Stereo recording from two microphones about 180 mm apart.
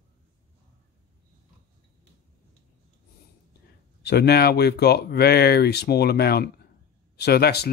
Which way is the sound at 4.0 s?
65° left (ahead or behind).